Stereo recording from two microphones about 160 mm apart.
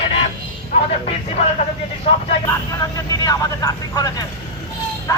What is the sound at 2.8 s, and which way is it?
Speech, 20° left (ahead or behind).